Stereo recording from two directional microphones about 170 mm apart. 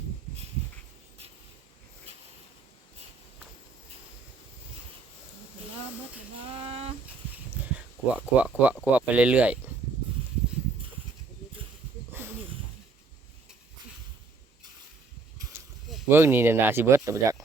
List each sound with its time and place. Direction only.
6.5 s a sound: 35° right (ahead or behind)
7.7 s speech: 10° right (ahead or behind)
16.0 s speech: 15° right (ahead or behind)